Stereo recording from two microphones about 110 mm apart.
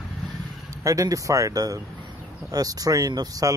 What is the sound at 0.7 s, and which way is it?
Speech, 30° right (ahead or behind).